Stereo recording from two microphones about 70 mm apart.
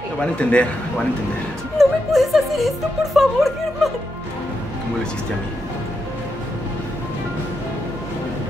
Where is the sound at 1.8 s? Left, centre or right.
Centre.